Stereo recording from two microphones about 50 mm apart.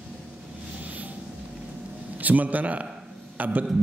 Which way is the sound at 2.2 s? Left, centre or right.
Right.